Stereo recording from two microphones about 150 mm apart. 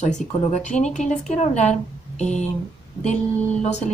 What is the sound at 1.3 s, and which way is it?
Speech, 50° left (ahead or behind).